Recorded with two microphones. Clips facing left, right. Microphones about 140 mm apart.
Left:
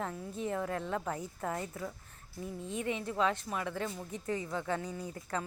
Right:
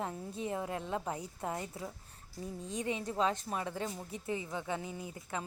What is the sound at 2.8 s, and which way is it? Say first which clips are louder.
A woman's voice: left 1 dB; 25° right (ahead or behind).